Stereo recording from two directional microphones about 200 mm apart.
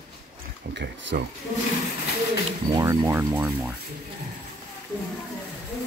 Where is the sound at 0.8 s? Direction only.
60° right (ahead or behind).